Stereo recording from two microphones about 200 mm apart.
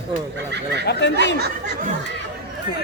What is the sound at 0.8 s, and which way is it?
Speech, 55° left (ahead or behind).